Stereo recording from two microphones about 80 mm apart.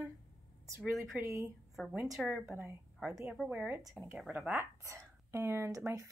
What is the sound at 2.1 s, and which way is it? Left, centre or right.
Speech, centre.